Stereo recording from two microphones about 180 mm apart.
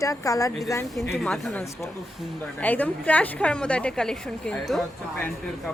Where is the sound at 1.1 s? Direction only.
5° left (ahead or behind).